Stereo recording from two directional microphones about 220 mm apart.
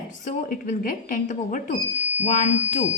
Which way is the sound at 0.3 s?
40° left (ahead or behind).